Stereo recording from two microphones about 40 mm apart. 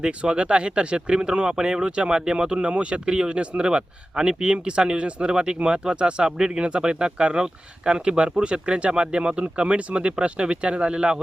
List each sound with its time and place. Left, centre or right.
0.0 s speech: right